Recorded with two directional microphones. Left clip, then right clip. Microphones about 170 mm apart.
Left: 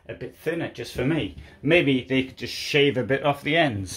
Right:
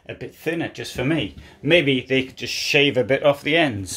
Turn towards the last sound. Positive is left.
turn(degrees=-5)  # may be behind; listen again after turning